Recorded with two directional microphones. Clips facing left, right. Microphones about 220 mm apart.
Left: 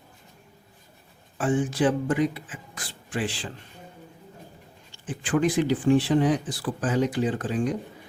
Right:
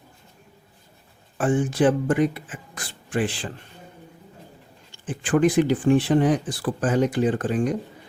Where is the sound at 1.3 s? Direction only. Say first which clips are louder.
Right 3 dB; 50° right (ahead or behind).